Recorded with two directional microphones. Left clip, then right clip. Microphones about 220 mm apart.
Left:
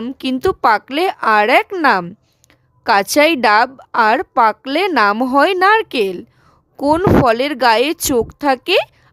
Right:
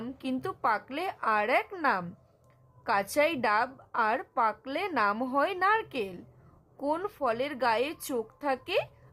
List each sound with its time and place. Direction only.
0.0 s a woman's voice: 45° left (ahead or behind)